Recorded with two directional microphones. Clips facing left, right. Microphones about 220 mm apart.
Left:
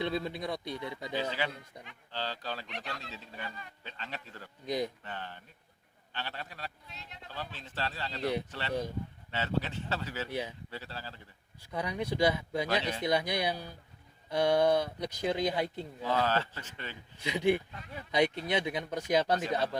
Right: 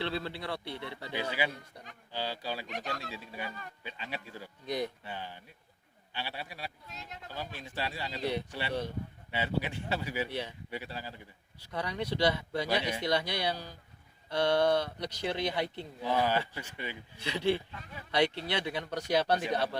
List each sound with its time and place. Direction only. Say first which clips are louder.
0.0 s speech: left 2 dB; 15° left (ahead or behind)
1.1 s speech: right 1 dB; 10° right (ahead or behind)
2.6 s speech: right 4 dB; 45° right (ahead or behind)
3.1 s speech: right 3 dB; 10° right (ahead or behind)
6.9 s speech: right 4 dB; 45° right (ahead or behind)
7.3 s speech: right 1 dB; 10° right (ahead or behind)
11.7 s speech: left 1 dB; 15° left (ahead or behind)
12.6 s speech: right 1 dB; 10° right (ahead or behind)
13.1 s speech: left 3 dB; 15° left (ahead or behind)
16.0 s speech: right 1 dB; 15° right (ahead or behind)
17.2 s speech: left 2 dB; 15° left (ahead or behind)
19.3 s speech: even; 15° right (ahead or behind)